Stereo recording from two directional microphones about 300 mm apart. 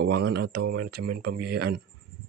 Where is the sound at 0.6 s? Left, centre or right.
Right.